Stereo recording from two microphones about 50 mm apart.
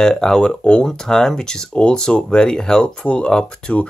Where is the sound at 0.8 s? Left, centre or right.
Centre.